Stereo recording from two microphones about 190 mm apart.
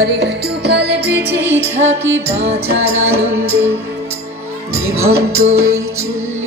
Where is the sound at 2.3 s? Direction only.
35° right (ahead or behind).